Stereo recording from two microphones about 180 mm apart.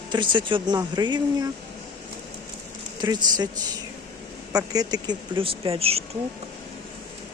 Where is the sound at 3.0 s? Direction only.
25° right (ahead or behind).